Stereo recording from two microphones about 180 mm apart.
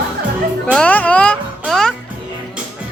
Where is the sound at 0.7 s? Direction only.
10° left (ahead or behind).